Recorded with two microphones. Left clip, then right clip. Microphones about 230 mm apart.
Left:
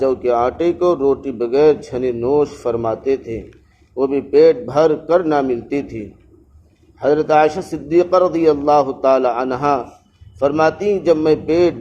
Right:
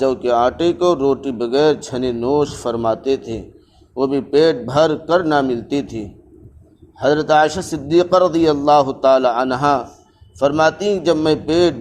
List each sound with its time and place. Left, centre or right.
0.0 s speech: right
7.0 s speech: right